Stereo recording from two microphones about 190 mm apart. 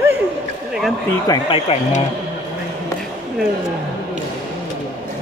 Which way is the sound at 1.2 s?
25° left (ahead or behind).